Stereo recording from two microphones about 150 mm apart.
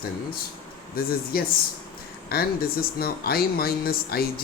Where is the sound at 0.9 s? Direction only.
85° left.